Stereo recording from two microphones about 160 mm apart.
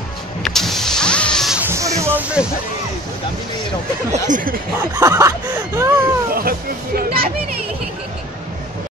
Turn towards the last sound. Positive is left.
turn(degrees=-65)  # may be behind; listen again after turning